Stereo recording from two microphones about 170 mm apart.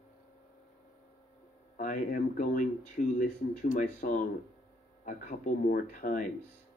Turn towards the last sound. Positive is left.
turn(degrees=50)  # may be behind; listen again after turning